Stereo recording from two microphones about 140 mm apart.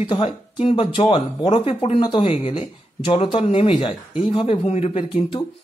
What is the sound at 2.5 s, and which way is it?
Speech, 40° left (ahead or behind).